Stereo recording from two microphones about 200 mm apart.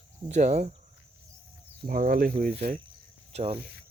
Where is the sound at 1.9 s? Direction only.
45° right (ahead or behind).